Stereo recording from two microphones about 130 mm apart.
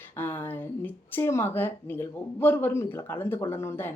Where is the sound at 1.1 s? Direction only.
20° left (ahead or behind).